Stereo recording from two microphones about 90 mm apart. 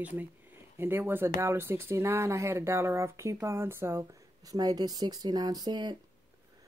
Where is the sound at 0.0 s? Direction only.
20° right (ahead or behind); by 5.9 s 55° right (ahead or behind).